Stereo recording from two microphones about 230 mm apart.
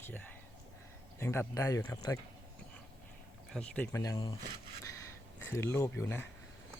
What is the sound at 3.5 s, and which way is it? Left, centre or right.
Speech, centre.